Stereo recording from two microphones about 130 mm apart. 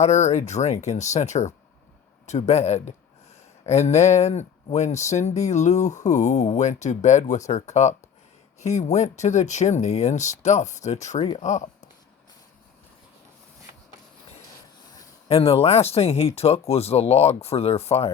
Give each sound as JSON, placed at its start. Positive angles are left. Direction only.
{"t": 0.0, "sound": "speech", "side_deg": 60}
{"t": 15.3, "sound": "speech", "side_deg": 50}